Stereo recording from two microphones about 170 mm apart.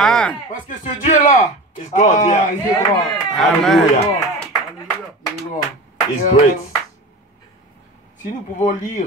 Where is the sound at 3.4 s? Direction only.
Centre (ahead or behind).